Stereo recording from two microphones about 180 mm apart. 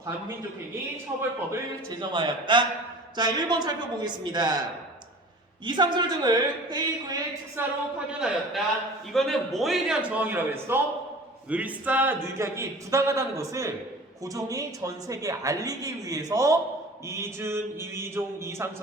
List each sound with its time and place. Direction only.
1.5 s a woman's voice: 25° right (ahead or behind)
5.6 s a woman's voice: 25° right (ahead or behind)
7.9 s a man's voice: 5° right (ahead or behind)